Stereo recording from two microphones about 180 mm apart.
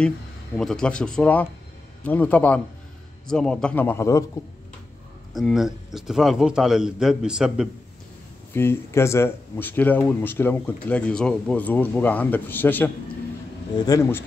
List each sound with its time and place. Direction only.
0.6 s a man's voice: 5° left (ahead or behind)
5.3 s a man's voice: centre (ahead or behind)
8.5 s speech: 15° left (ahead or behind)